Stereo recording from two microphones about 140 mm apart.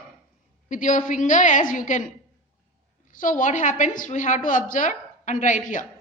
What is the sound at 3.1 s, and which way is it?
A woman's voice, 70° left (ahead or behind).